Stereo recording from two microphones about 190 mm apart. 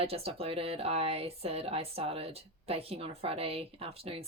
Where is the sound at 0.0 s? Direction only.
30° right (ahead or behind).